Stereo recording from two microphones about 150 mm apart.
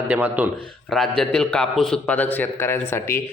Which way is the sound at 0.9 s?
5° left (ahead or behind).